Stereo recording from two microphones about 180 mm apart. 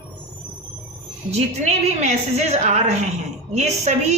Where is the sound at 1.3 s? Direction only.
40° right (ahead or behind).